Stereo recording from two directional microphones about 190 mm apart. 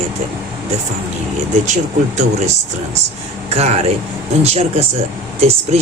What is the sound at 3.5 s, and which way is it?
Speech, 35° right (ahead or behind).